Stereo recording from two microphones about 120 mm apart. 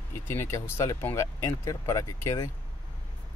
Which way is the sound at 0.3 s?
20° left (ahead or behind).